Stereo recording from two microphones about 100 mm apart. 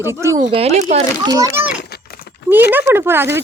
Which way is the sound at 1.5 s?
15° right (ahead or behind).